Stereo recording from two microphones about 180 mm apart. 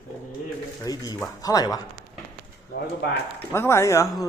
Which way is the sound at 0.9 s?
20° left (ahead or behind).